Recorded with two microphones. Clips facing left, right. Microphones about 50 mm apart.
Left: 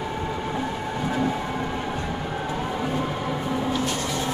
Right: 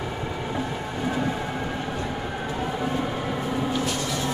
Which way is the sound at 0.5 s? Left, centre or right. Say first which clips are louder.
Left 1 dB; centre.